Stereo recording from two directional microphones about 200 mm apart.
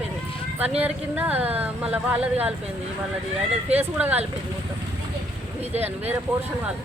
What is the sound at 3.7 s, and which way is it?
Speech, 10° right (ahead or behind).